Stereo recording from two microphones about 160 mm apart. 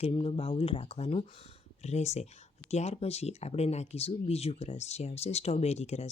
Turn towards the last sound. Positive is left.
turn(degrees=40)  # may be behind; listen again after turning